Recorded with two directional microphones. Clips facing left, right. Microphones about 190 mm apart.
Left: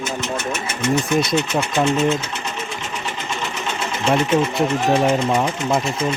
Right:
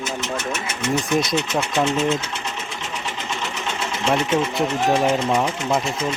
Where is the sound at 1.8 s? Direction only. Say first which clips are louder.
Left 2 dB; centre (ahead or behind).